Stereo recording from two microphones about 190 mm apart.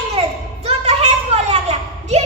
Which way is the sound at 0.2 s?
35° right (ahead or behind).